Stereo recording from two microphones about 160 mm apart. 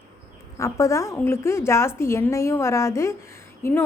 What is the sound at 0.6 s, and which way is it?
A woman's voice, 20° left (ahead or behind).